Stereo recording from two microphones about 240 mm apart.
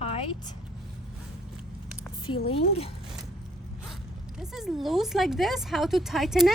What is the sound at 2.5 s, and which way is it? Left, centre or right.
Speech, left.